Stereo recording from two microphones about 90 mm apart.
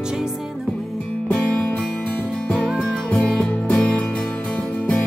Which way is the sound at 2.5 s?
Centre (ahead or behind).